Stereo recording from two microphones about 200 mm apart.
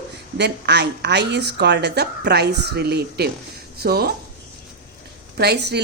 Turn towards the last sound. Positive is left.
turn(degrees=-55)  # may be behind; listen again after turning